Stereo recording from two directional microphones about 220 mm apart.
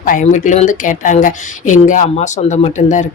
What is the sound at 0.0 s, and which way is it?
A woman's voice, 35° left (ahead or behind).